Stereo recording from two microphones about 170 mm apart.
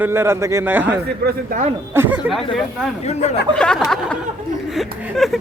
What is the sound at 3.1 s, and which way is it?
Speech, 40° left (ahead or behind).